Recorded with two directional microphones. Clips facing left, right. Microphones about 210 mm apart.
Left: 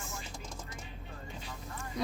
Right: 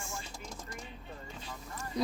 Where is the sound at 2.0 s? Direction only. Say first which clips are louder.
Right 3 dB; 35° right (ahead or behind).